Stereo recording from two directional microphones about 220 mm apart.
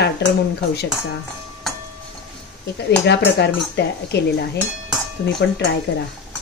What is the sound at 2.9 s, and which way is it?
Speech, 50° left (ahead or behind).